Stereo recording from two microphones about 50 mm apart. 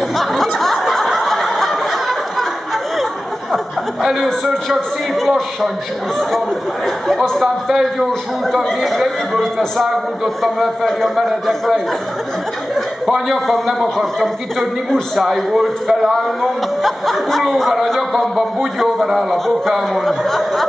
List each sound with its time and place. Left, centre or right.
0.4 s a sound: centre
1.0 s snicker: centre
4.0 s a man's voice: centre
7.3 s a man's voice: centre
12.7 s chuckle: centre
13.5 s a man's voice: centre